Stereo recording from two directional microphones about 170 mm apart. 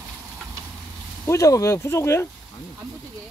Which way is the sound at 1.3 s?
20° left (ahead or behind).